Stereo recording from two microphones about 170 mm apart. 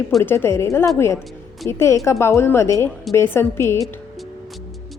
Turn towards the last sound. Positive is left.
turn(degrees=15)  # may be behind; listen again after turning